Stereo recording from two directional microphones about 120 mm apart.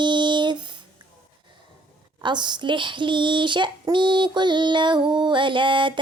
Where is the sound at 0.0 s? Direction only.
40° right (ahead or behind).